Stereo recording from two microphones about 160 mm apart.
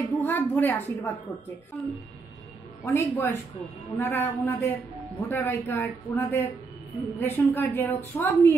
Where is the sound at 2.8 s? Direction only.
15° left (ahead or behind).